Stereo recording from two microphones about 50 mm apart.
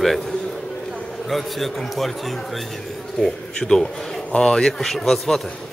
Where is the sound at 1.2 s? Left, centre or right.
Centre.